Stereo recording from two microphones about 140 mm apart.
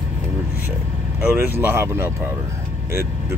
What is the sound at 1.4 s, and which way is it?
Speech, 15° right (ahead or behind).